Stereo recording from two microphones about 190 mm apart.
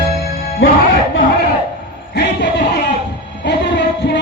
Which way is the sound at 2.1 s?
55° left (ahead or behind).